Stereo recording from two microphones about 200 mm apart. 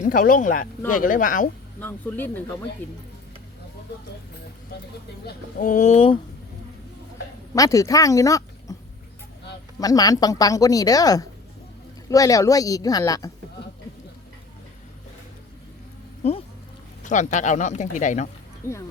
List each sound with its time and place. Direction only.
0.0 s speech: 45° left (ahead or behind)
1.8 s a woman's voice: 10° left (ahead or behind)
5.2 s speech: 40° left (ahead or behind)
7.5 s speech: 15° left (ahead or behind)
9.8 s a woman's voice: 20° left (ahead or behind)
17.0 s speech: 40° left (ahead or behind)
18.6 s a woman's voice: 15° left (ahead or behind)